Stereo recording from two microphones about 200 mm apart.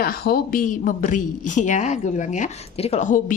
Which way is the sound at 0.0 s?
45° left (ahead or behind).